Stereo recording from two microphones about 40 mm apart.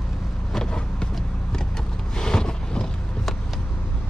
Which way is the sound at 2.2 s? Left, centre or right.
Centre.